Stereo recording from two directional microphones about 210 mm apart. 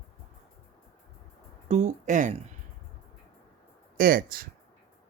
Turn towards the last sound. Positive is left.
turn(degrees=-45)  # may be behind; listen again after turning